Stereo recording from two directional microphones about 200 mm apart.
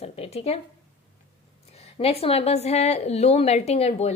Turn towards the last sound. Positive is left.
turn(degrees=30)  # may be behind; listen again after turning